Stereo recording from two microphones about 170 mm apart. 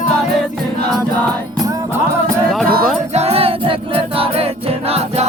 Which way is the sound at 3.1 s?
35° right (ahead or behind).